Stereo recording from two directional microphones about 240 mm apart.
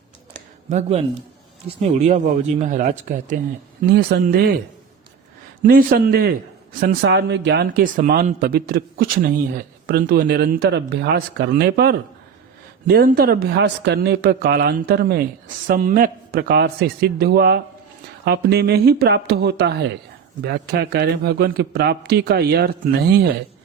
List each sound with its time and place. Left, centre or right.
0.7 s speech: right
5.6 s speech: right